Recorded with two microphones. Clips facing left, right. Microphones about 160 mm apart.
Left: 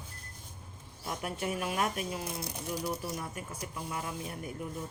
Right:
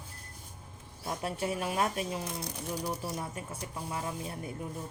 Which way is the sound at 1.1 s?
30° right (ahead or behind).